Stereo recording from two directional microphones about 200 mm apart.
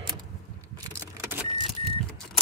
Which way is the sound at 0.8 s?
15° right (ahead or behind).